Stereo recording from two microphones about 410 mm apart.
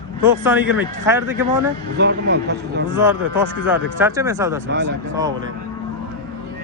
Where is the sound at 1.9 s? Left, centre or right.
Right.